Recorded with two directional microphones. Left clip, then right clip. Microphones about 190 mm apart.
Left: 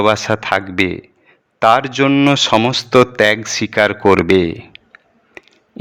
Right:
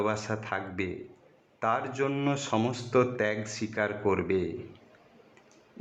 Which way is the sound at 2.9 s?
60° left (ahead or behind).